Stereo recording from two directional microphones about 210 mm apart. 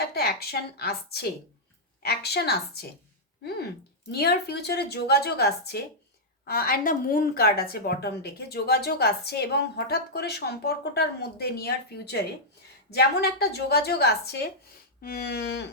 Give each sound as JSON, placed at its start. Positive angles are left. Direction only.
{"t": 0.1, "sound": "a woman's voice", "side_deg": 50}
{"t": 4.1, "sound": "a woman's voice", "side_deg": 50}